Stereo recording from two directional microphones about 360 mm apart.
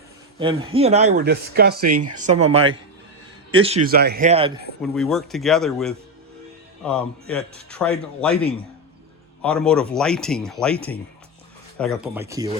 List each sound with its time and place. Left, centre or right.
0.3 s speech: centre
3.8 s speech: right
4.8 s a man's voice: centre
11.8 s speech: centre